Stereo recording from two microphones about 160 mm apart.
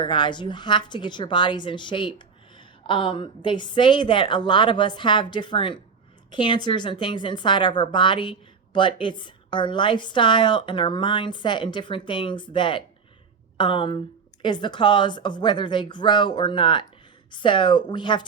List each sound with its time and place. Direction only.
0.0 s a woman's voice: 30° left (ahead or behind)